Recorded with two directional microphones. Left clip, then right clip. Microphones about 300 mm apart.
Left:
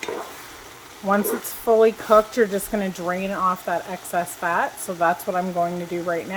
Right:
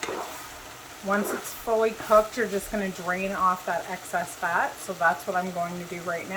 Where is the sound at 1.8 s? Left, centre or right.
Left.